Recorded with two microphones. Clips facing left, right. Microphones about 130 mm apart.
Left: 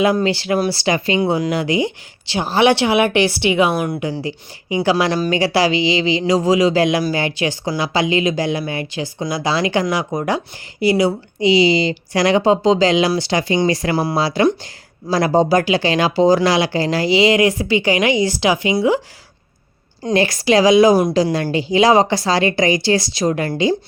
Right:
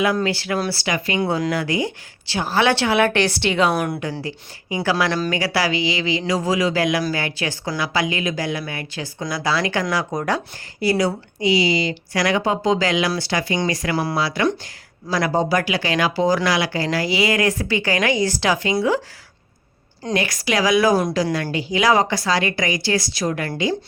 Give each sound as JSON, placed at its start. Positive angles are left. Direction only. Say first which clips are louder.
{"t": 0.0, "sound": "a woman's voice", "louder": "left 4 dB", "side_deg": 25}
{"t": 3.8, "sound": "speech", "louder": "left 2 dB", "side_deg": 0}
{"t": 4.2, "sound": "speech", "louder": "left 4 dB", "side_deg": 20}
{"t": 10.1, "sound": "speech", "louder": "left 3 dB", "side_deg": 10}
{"t": 20.1, "sound": "speech", "louder": "left 7 dB", "side_deg": 30}